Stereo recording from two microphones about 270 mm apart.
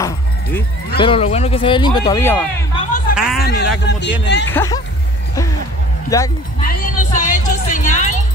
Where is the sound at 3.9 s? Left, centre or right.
Left.